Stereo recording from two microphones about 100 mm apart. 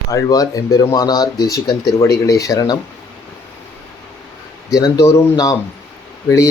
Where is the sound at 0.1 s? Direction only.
35° left (ahead or behind).